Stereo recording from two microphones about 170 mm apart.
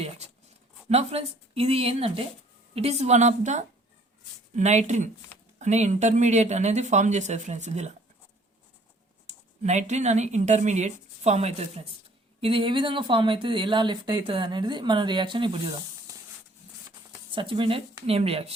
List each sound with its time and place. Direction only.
0.0 s speech: 40° right (ahead or behind)
9.2 s a woman's voice: 45° right (ahead or behind); by 16.1 s 30° right (ahead or behind)
17.3 s speech: 30° right (ahead or behind)